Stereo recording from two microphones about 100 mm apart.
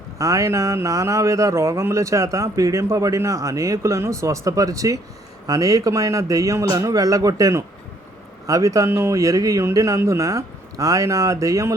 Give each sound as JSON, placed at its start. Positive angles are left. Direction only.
{"t": 0.2, "sound": "speech", "side_deg": -35}